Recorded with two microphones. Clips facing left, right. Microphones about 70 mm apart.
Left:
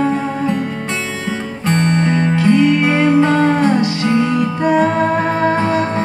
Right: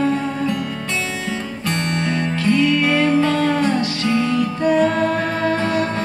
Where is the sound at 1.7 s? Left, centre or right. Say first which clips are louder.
Left 7 dB; left.